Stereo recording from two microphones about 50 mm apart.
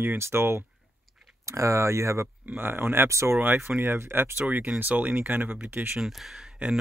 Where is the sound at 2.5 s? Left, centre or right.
Right.